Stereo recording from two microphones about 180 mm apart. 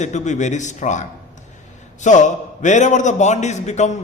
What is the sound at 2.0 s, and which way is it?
A man's voice, 40° left (ahead or behind).